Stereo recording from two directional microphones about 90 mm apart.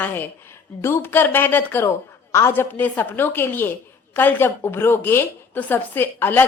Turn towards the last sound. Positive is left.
turn(degrees=20)  # may be behind; listen again after turning